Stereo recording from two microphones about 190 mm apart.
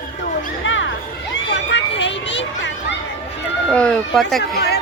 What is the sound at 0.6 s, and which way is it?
Music, 80° left.